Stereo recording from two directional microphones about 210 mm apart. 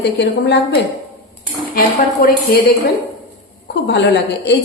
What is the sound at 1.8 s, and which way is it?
Speech, 45° left (ahead or behind).